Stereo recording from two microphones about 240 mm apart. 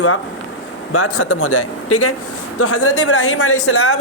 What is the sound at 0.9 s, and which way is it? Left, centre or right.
A man's voice, left.